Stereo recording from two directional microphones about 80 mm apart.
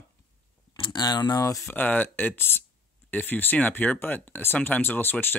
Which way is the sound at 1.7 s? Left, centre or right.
Left.